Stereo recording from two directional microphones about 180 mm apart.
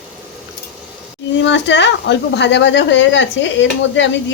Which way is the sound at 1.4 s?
80° left.